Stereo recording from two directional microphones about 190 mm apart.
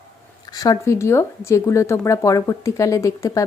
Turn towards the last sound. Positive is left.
turn(degrees=15)  # may be behind; listen again after turning